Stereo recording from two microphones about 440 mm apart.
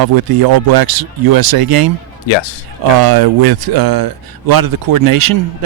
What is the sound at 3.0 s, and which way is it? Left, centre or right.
Speech, right.